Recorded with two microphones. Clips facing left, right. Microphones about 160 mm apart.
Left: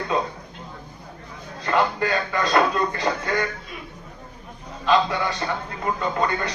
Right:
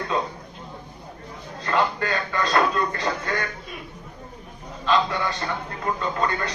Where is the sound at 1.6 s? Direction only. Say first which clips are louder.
Left 2 dB; 20° left (ahead or behind).